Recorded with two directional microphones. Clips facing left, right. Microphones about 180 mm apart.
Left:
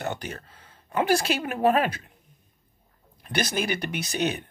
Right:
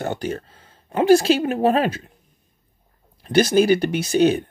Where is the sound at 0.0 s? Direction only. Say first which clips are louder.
Right 7 dB; 30° right (ahead or behind).